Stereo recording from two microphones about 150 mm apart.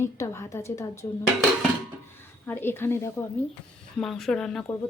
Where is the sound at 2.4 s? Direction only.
15° left (ahead or behind).